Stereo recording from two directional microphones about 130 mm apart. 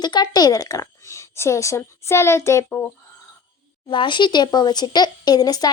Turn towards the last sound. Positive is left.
turn(degrees=30)  # may be behind; listen again after turning